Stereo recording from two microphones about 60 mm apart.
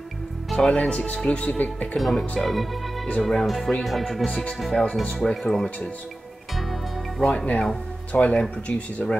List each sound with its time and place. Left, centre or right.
0.7 s speech: centre
2.0 s speech: centre
6.5 s music: centre
7.2 s speech: centre